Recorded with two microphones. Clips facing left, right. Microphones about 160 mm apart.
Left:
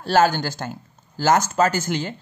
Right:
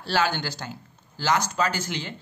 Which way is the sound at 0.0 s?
45° left (ahead or behind).